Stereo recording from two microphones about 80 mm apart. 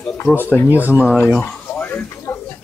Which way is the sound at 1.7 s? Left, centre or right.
Left.